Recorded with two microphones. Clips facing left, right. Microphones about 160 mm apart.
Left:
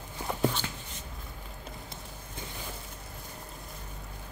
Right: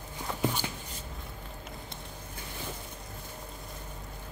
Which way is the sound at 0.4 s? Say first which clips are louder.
Left 2 dB; 10° right (ahead or behind).